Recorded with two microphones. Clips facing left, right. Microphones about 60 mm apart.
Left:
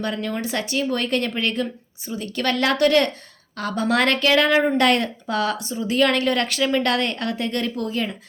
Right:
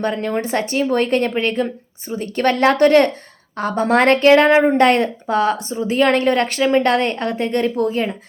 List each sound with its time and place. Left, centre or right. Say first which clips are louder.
0.0 s a woman's voice: right 5 dB; right